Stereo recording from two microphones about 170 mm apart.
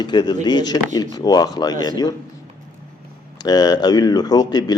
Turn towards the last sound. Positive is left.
turn(degrees=25)  # may be behind; listen again after turning